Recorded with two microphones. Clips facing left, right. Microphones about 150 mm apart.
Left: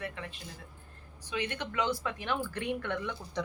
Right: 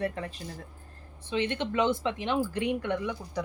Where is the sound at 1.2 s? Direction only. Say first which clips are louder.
Right 6 dB; 20° right (ahead or behind).